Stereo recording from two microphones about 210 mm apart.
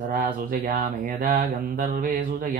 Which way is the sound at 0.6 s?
40° right (ahead or behind).